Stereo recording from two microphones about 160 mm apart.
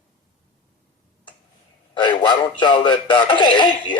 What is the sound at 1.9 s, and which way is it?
A man's voice, 30° left (ahead or behind).